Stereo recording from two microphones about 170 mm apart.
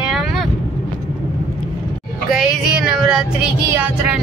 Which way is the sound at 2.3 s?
Centre (ahead or behind).